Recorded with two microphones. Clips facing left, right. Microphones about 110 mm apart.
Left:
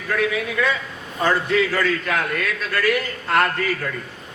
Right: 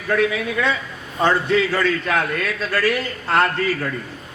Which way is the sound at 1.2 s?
30° right (ahead or behind).